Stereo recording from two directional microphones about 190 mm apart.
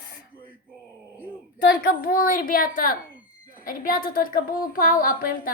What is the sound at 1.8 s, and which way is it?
Speech, 50° left (ahead or behind).